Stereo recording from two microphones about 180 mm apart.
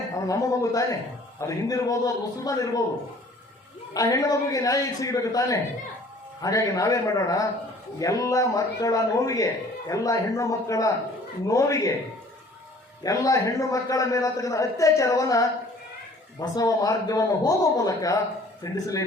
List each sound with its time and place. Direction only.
0.3 s a man's voice: 15° left (ahead or behind)
3.9 s a man's voice: 20° left (ahead or behind)
13.0 s a man's voice: 20° left (ahead or behind)